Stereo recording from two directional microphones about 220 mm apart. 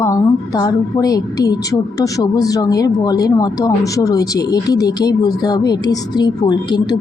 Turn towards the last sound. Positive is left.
turn(degrees=20)  # may be behind; listen again after turning